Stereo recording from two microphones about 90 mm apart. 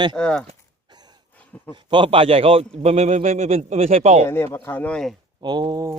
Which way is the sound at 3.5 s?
90° right.